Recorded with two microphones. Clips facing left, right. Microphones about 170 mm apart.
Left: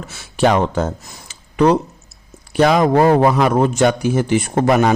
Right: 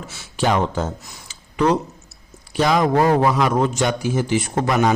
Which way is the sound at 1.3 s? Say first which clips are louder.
Left 4 dB; 60° left (ahead or behind).